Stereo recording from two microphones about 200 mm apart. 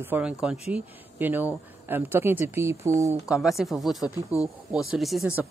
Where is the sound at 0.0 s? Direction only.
10° right (ahead or behind).